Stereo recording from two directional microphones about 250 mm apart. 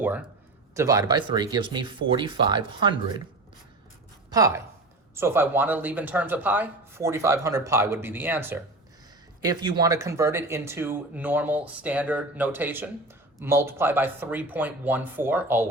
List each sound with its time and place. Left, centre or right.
0.0 s a man's voice: centre
4.3 s speech: centre